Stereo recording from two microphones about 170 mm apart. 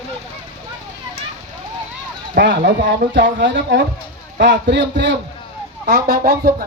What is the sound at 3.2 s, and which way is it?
Speech, 90° right.